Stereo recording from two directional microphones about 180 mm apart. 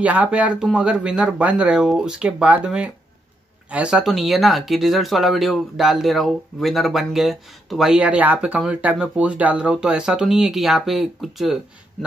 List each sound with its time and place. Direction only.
0.0 s speech: 10° right (ahead or behind)